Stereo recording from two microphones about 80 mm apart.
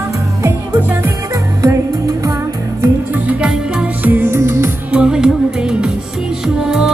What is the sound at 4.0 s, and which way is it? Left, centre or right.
Music, right.